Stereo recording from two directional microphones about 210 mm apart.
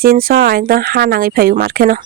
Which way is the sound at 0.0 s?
45° right (ahead or behind).